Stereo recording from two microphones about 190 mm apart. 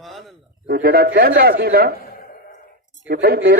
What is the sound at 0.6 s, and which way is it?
A man's voice, 50° right (ahead or behind).